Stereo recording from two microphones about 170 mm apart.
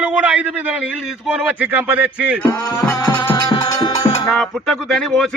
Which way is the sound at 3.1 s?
25° left (ahead or behind).